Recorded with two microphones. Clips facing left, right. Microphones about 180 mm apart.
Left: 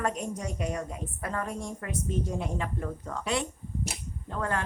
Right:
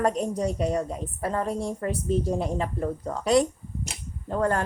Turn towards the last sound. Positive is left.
turn(degrees=-40)  # may be behind; listen again after turning